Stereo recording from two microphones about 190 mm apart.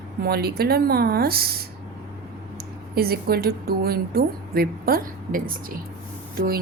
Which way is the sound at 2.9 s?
55° right (ahead or behind).